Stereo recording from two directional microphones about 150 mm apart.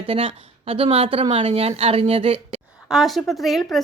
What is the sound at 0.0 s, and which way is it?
A woman's voice, 40° right (ahead or behind).